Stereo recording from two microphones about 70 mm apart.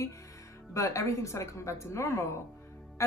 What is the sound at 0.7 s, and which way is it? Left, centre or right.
A woman's voice, left.